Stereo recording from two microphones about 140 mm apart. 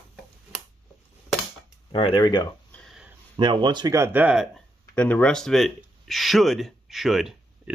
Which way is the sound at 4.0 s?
15° right (ahead or behind).